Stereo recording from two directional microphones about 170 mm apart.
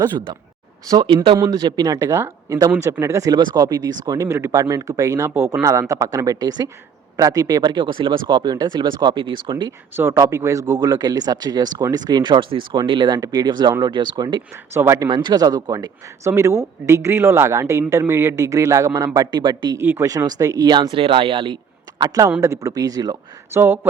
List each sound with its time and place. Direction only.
0.9 s speech: 25° right (ahead or behind)
9.9 s speech: 15° right (ahead or behind)
14.5 s speech: 15° right (ahead or behind)
19.8 s speech: 15° right (ahead or behind)